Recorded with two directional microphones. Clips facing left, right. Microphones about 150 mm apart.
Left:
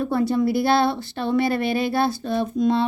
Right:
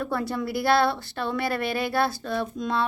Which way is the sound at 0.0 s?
20° left (ahead or behind).